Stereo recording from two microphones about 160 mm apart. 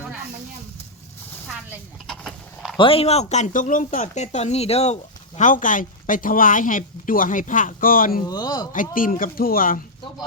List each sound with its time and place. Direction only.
2.0 s a sound: 5° left (ahead or behind)
2.7 s speech: 35° left (ahead or behind)
5.4 s speech: 55° left (ahead or behind)
8.3 s speech: 25° left (ahead or behind)
8.7 s speech: 55° left (ahead or behind)